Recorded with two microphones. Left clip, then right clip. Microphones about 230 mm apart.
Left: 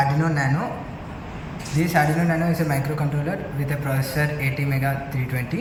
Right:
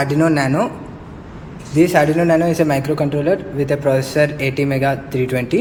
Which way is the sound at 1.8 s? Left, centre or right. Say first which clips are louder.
Right 8 dB; right.